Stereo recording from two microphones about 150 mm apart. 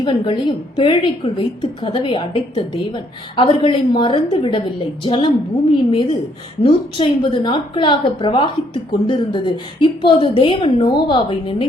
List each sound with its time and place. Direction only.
0.0 s a woman's voice: 30° left (ahead or behind)